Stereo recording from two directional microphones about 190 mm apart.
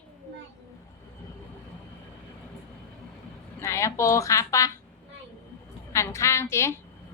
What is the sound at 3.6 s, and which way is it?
Speech, 15° left (ahead or behind).